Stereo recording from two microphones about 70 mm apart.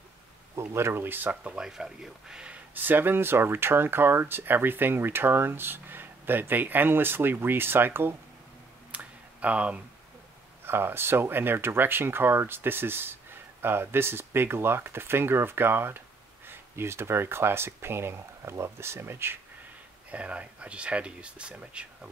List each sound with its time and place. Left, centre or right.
0.6 s speech: right; by 2.6 s centre
2.7 s speech: right
8.9 s a sound: right
10.6 s speech: right
20.1 s speech: centre